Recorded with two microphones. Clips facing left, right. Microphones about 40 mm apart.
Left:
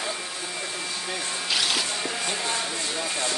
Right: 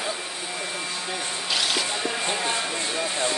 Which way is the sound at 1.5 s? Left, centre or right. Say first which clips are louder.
Even; centre.